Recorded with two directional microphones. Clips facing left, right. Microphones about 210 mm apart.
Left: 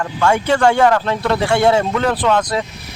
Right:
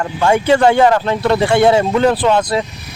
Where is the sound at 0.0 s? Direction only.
20° right (ahead or behind); by 1.9 s 5° right (ahead or behind).